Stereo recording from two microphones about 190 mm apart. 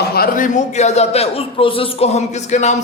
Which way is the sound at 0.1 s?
50° left (ahead or behind).